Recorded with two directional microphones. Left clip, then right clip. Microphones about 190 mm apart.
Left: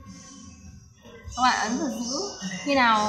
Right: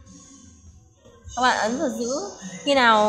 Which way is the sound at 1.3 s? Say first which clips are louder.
Right 2 dB; 55° right (ahead or behind).